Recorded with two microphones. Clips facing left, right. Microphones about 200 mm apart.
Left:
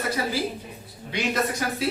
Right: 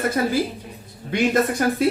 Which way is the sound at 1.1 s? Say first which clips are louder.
Right 7 dB; 50° right (ahead or behind).